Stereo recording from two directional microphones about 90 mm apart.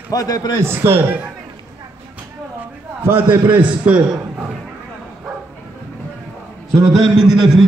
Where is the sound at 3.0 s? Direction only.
20° right (ahead or behind).